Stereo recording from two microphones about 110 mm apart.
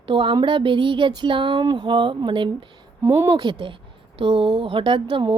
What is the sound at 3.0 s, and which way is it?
Speech, 25° right (ahead or behind).